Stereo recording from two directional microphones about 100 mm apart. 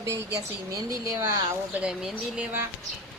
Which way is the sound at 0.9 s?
30° right (ahead or behind).